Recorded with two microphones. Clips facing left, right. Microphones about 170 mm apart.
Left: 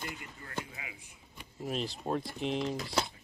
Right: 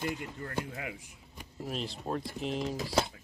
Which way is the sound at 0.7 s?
60° right (ahead or behind).